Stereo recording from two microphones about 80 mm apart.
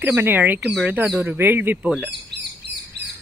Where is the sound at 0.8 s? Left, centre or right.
Centre.